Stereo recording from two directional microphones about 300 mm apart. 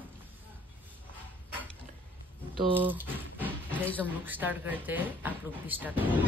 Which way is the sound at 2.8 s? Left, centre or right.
Centre.